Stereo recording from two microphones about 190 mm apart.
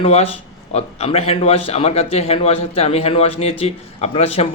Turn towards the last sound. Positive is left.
turn(degrees=30)  # may be behind; listen again after turning